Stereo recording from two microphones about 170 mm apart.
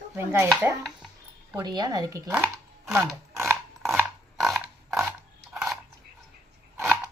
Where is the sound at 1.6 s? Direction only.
25° right (ahead or behind).